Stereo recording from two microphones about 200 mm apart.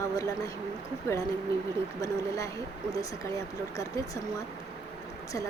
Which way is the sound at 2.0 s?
15° left (ahead or behind).